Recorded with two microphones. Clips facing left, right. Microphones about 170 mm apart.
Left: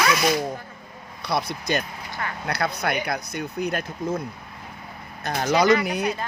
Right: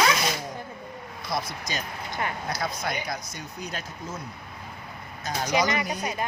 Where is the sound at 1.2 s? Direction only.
65° left (ahead or behind).